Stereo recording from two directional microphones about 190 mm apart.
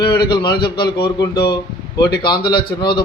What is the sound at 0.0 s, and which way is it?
A man's voice, 25° left (ahead or behind).